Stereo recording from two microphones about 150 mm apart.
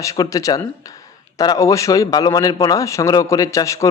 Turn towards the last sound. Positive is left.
turn(degrees=20)  # may be behind; listen again after turning